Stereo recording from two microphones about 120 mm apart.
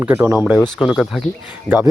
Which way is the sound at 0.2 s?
10° right (ahead or behind).